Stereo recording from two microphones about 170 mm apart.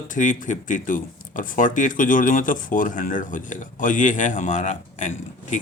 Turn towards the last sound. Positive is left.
turn(degrees=45)  # may be behind; listen again after turning